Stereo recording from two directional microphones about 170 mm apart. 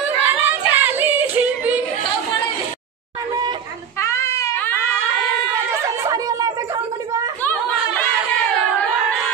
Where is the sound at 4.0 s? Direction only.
15° left (ahead or behind).